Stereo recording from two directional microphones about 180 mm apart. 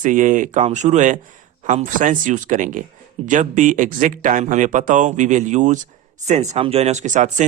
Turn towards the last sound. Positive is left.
turn(degrees=-45)  # may be behind; listen again after turning